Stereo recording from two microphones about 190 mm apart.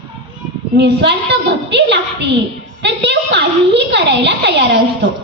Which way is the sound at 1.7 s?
65° right (ahead or behind).